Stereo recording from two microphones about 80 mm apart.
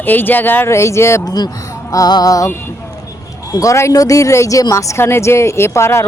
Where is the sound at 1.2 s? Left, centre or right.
Left.